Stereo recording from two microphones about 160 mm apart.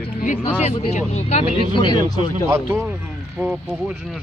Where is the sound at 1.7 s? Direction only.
30° left (ahead or behind).